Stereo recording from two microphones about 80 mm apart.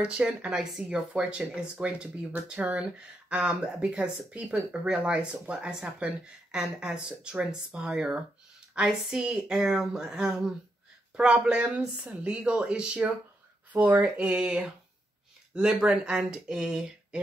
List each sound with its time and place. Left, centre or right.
0.0 s speech: centre